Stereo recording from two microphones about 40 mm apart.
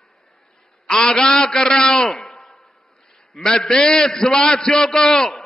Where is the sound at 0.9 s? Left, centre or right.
Centre.